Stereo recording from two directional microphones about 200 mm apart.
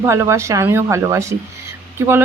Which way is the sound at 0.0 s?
15° right (ahead or behind).